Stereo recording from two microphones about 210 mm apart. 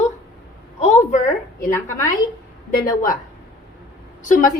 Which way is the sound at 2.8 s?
40° left (ahead or behind).